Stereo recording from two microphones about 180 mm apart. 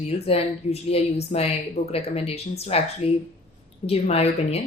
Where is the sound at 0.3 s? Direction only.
35° left (ahead or behind).